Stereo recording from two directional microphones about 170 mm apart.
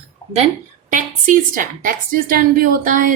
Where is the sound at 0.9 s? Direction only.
50° right (ahead or behind).